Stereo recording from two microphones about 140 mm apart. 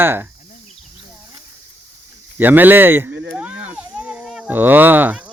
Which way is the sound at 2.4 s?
15° right (ahead or behind).